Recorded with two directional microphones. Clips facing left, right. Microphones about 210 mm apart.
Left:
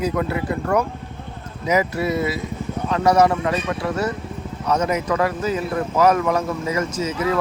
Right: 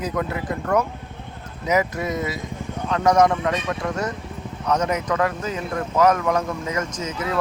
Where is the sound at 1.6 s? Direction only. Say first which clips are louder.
Left 2 dB; 10° left (ahead or behind).